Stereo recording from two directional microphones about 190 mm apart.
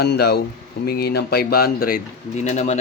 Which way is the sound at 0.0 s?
60° left (ahead or behind).